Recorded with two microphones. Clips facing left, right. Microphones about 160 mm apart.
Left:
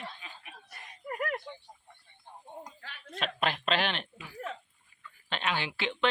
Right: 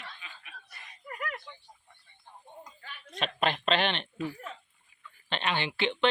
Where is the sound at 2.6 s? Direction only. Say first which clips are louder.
Left 1 dB; 75° left (ahead or behind).